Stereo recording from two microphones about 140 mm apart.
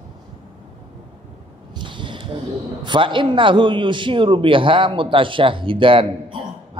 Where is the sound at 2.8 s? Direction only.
35° right (ahead or behind).